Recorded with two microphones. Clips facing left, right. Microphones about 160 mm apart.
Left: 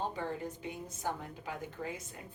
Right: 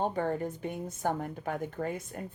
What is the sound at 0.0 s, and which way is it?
A woman's voice, 50° right (ahead or behind).